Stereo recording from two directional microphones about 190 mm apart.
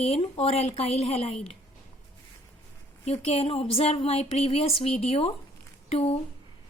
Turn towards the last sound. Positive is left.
turn(degrees=35)  # may be behind; listen again after turning